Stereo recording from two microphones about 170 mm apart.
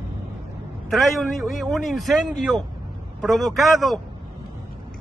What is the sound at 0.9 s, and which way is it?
A man's voice, centre (ahead or behind).